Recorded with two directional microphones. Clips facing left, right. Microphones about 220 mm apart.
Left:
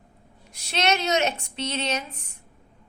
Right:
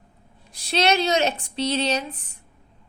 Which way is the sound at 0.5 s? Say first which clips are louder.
Right 4 dB; 35° right (ahead or behind).